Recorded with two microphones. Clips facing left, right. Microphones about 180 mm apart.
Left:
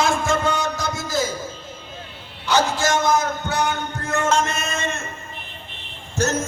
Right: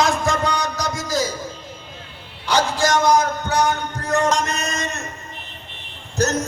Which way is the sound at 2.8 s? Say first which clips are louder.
Right 3 dB; 35° right (ahead or behind).